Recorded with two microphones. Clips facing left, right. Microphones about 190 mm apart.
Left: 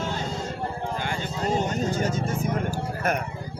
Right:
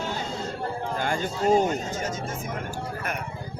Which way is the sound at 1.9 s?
35° left (ahead or behind).